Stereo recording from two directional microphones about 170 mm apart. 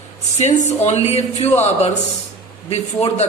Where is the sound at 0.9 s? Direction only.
40° left (ahead or behind).